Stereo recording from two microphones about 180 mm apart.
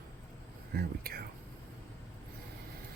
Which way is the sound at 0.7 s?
60° right (ahead or behind).